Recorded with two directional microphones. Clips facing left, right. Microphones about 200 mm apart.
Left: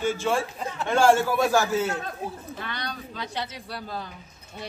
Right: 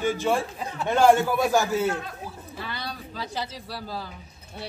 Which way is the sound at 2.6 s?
5° right (ahead or behind).